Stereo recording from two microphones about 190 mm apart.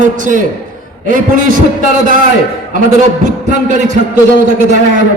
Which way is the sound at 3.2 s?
40° right (ahead or behind).